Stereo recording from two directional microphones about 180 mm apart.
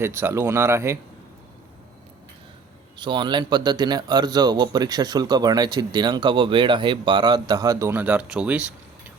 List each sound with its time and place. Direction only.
0.0 s speech: 10° right (ahead or behind)
3.0 s a man's voice: 25° right (ahead or behind); by 8.6 s 5° right (ahead or behind)